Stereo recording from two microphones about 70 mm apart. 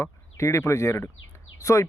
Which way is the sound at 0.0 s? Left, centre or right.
Left.